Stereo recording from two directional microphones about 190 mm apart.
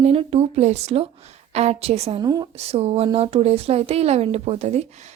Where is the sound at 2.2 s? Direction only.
20° right (ahead or behind).